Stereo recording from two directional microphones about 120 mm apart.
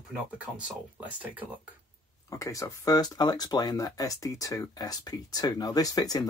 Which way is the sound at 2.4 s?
25° left (ahead or behind).